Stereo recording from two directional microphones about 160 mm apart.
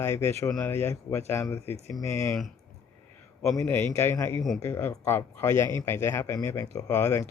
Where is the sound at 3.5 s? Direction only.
15° left (ahead or behind).